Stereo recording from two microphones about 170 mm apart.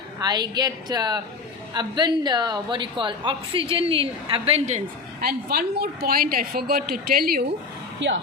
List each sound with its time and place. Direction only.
0.2 s a woman's voice: 25° right (ahead or behind); by 4.8 s 40° right (ahead or behind)
5.2 s a woman's voice: 65° right (ahead or behind)
7.9 s speech: 90° right